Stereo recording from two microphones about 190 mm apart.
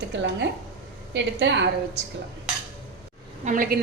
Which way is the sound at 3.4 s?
45° right (ahead or behind).